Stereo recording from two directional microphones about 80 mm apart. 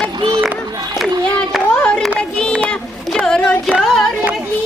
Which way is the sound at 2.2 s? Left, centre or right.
Centre.